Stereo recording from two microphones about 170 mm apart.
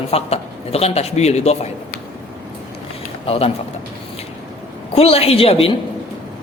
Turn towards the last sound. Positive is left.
turn(degrees=35)  # may be behind; listen again after turning